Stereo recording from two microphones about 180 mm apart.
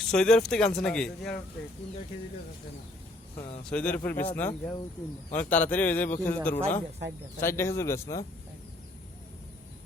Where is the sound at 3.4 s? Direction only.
35° left (ahead or behind).